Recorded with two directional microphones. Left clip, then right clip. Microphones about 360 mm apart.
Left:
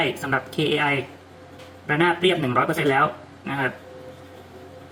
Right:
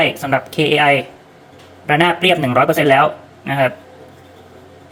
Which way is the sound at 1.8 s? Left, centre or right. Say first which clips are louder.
Right 7 dB; right.